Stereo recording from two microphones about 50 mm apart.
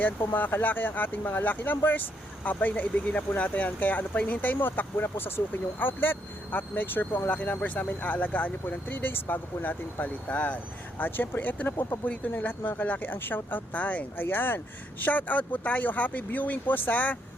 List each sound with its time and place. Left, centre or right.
0.3 s speech: left
7.3 s speech: left
14.3 s speech: left